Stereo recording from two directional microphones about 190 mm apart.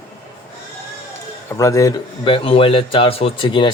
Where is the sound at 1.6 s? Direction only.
15° left (ahead or behind).